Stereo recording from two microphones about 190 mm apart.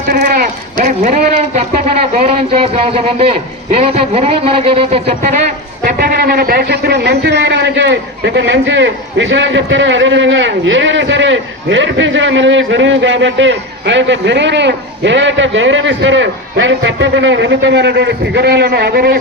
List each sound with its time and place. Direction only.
0.1 s a man's voice: 50° right (ahead or behind); by 5.4 s 35° right (ahead or behind)
5.8 s speech: 55° right (ahead or behind)